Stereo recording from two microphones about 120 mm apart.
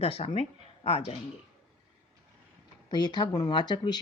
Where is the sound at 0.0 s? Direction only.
55° left (ahead or behind).